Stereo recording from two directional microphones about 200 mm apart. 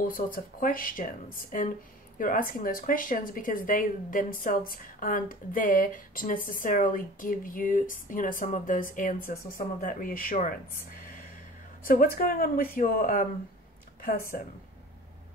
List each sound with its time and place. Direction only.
0.0 s speech: 45° left (ahead or behind)
14.3 s speech: 45° left (ahead or behind)